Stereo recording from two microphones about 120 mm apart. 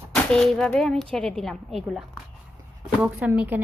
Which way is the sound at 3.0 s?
10° right (ahead or behind).